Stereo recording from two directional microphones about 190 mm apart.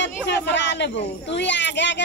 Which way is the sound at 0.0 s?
65° left (ahead or behind).